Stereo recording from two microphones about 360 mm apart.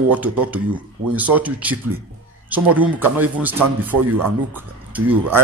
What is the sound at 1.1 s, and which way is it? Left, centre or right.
Speech, centre.